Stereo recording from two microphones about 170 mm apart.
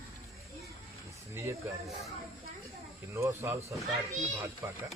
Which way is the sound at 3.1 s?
15° right (ahead or behind).